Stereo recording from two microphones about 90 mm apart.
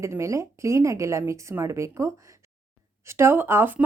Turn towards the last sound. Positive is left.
turn(degrees=-25)  # may be behind; listen again after turning